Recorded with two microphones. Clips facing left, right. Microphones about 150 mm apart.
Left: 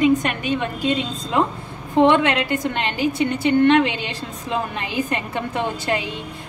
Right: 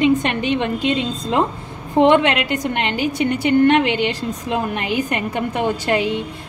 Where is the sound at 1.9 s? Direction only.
20° right (ahead or behind).